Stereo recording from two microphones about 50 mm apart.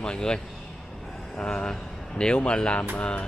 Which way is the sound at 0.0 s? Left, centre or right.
Centre.